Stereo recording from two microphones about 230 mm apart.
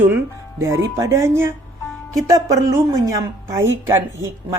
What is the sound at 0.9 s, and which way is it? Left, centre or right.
A woman's voice, centre.